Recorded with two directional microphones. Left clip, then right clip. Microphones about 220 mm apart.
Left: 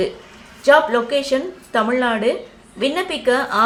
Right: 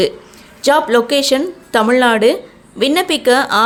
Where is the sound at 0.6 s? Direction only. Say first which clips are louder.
Right 2 dB; 50° right (ahead or behind).